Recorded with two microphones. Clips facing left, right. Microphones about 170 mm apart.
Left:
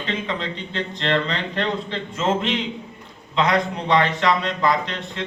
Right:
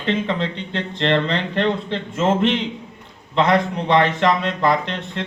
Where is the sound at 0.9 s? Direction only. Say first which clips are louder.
Right 4 dB; 55° right (ahead or behind).